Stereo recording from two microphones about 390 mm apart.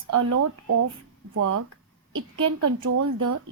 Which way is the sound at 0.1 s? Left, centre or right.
Right.